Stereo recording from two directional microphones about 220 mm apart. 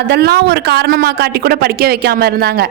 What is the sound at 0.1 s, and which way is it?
Speech, 45° right (ahead or behind).